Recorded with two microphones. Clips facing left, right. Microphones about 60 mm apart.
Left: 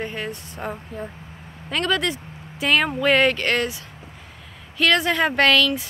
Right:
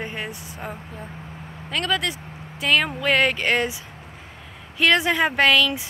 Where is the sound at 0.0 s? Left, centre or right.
Centre.